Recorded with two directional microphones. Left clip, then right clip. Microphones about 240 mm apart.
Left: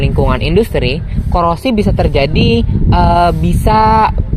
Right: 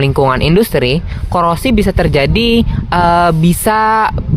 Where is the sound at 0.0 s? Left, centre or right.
Right.